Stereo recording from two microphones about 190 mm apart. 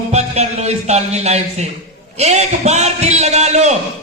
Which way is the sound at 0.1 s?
35° right (ahead or behind).